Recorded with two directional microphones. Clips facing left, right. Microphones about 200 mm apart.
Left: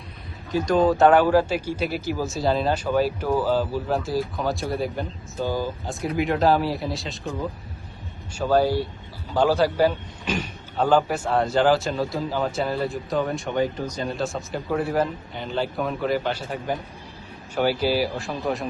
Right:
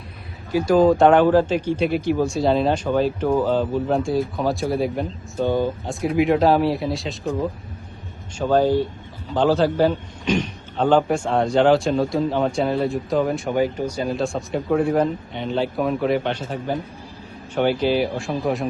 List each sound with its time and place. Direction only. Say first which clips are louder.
0.5 s a man's voice: right 4 dB; 5° right (ahead or behind)
8.4 s a man's voice: right 3 dB; 10° left (ahead or behind)